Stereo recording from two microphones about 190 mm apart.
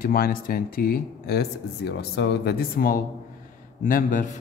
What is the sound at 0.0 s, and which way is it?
A man's voice, 50° left (ahead or behind).